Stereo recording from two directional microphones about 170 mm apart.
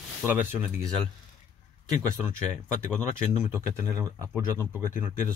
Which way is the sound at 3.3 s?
15° right (ahead or behind).